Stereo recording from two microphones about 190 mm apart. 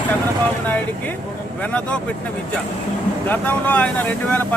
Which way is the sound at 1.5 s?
5° left (ahead or behind).